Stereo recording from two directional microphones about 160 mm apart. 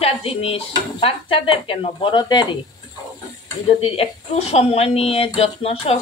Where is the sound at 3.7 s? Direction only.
35° left (ahead or behind).